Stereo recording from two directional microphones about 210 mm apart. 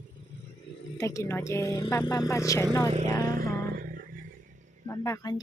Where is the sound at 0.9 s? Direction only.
15° left (ahead or behind).